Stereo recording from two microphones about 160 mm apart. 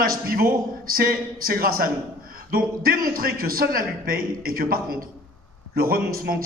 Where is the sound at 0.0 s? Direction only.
65° right (ahead or behind).